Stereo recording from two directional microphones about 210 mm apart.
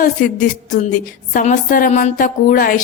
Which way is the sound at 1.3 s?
35° left (ahead or behind).